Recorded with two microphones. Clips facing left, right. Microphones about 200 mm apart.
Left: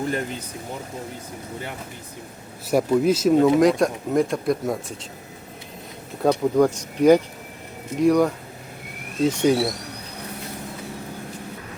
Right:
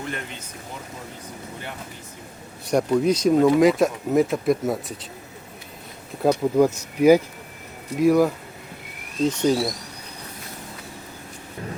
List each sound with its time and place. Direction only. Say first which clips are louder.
0.0 s speech: left 7 dB; 35° left (ahead or behind)
2.6 s speech: left 1 dB; 5° left (ahead or behind)
6.2 s speech: even; 5° right (ahead or behind)
9.2 s speech: left 1 dB; 10° left (ahead or behind)